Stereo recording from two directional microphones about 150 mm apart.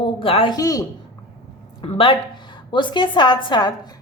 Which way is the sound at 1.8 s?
35° left (ahead or behind).